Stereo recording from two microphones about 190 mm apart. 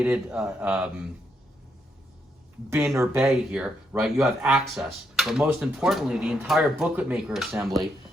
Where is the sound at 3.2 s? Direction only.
5° right (ahead or behind).